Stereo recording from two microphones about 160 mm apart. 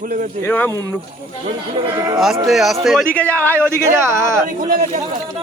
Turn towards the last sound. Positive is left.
turn(degrees=-55)  # may be behind; listen again after turning